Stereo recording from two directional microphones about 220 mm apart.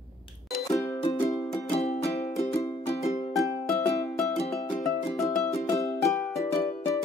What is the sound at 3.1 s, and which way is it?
Music, 30° left (ahead or behind).